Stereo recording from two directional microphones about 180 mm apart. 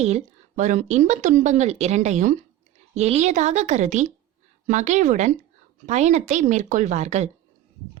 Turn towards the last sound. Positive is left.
turn(degrees=-40)  # may be behind; listen again after turning